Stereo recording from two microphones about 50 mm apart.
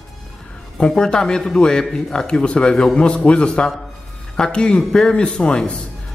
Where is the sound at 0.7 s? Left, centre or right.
Centre.